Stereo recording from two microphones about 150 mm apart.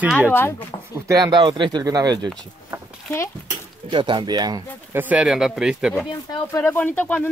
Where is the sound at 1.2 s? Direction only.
30° right (ahead or behind).